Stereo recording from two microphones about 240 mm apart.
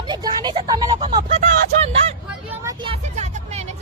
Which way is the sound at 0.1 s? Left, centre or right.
Centre.